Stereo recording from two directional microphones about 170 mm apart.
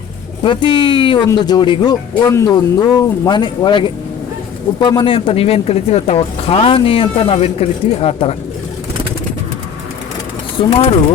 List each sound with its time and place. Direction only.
0.4 s speech: 30° left (ahead or behind)
10.7 s speech: 40° left (ahead or behind)